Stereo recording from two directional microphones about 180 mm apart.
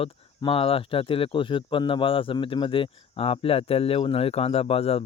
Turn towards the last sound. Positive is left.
turn(degrees=35)  # may be behind; listen again after turning